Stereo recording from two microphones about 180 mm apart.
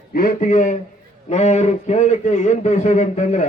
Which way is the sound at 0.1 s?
50° left (ahead or behind).